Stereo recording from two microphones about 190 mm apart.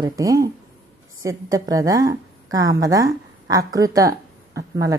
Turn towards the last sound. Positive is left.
turn(degrees=-15)  # may be behind; listen again after turning